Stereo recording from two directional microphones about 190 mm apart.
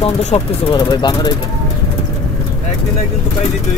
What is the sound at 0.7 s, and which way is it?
Speech, 20° left (ahead or behind).